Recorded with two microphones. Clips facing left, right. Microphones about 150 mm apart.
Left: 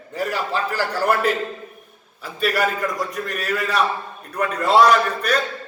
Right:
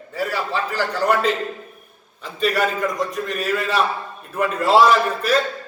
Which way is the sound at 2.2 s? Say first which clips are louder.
Right 1 dB; centre (ahead or behind).